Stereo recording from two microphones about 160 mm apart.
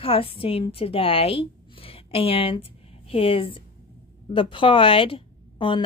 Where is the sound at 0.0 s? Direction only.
35° left (ahead or behind).